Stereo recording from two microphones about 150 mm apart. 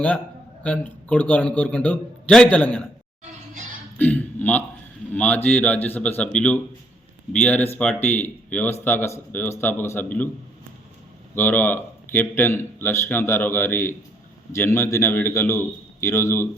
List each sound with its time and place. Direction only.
0.6 s a man's voice: 10° left (ahead or behind)
3.9 s a sound: 10° left (ahead or behind)
5.1 s a man's voice: 10° left (ahead or behind)
11.3 s a man's voice: 10° left (ahead or behind)